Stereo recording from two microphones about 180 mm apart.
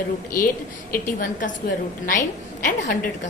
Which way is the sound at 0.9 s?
50° left (ahead or behind).